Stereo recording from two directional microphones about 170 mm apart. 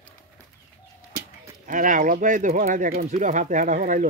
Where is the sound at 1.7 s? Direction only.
50° right (ahead or behind).